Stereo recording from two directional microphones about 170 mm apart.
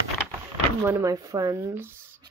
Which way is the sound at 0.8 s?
15° right (ahead or behind).